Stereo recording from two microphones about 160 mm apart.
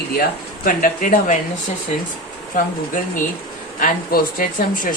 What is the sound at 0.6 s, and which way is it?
Speech, 60° left (ahead or behind).